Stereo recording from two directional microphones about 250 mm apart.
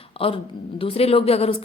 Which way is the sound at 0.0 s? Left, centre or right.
Left.